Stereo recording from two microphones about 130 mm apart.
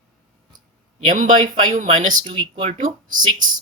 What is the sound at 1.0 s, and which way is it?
Speech, 80° right.